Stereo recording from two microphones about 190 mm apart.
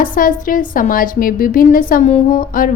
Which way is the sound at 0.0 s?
45° left (ahead or behind).